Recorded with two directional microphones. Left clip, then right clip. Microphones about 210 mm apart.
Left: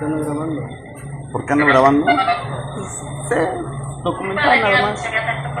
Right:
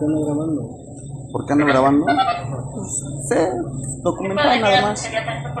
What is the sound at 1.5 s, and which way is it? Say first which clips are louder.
Speech: left 3 dB; 5° right (ahead or behind).